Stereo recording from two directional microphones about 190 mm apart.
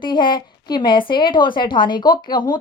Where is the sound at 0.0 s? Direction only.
25° left (ahead or behind).